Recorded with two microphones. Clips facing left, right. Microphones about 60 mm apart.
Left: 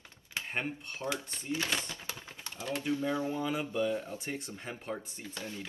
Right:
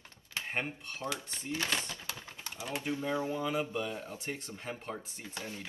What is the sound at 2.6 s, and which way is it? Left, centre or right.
Speech, right.